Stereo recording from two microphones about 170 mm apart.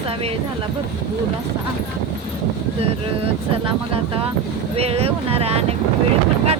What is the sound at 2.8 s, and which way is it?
Speech, 35° right (ahead or behind).